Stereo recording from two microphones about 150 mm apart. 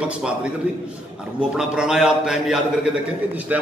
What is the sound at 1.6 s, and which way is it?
A man's voice, 5° right (ahead or behind).